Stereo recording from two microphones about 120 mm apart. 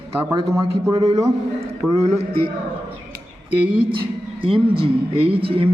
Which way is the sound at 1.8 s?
Centre (ahead or behind).